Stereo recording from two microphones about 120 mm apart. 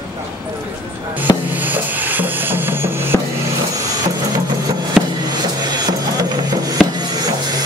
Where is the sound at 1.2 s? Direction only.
15° right (ahead or behind).